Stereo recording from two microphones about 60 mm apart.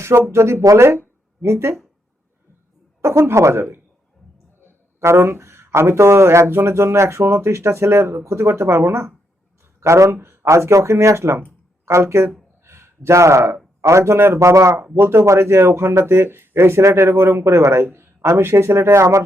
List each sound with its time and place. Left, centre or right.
0.0 s speech: right
3.2 s speech: right
4.9 s speech: right
9.8 s speech: right
10.2 s speech: right
10.4 s speech: right
14.3 s speech: right
14.9 s speech: right